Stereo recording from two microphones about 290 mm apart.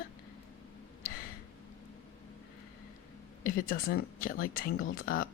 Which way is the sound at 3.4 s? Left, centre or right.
Left.